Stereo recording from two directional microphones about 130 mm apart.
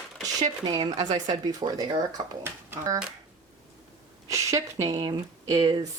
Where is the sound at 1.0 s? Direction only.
35° right (ahead or behind).